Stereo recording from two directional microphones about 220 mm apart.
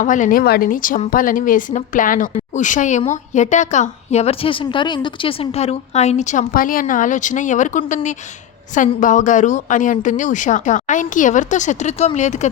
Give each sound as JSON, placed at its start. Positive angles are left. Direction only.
{"t": 0.0, "sound": "speech", "side_deg": 35}